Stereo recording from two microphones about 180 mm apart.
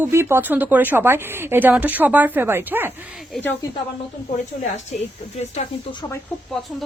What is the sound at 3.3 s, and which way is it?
Speech, centre (ahead or behind).